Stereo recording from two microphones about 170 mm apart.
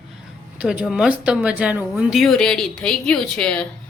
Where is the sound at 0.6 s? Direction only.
5° right (ahead or behind).